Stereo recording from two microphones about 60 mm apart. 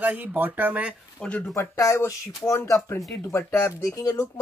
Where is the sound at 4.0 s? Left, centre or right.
Left.